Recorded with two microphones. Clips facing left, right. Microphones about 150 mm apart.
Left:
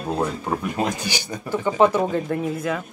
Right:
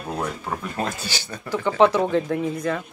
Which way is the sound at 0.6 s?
15° left (ahead or behind).